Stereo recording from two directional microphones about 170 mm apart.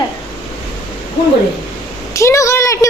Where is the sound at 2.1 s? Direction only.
15° left (ahead or behind).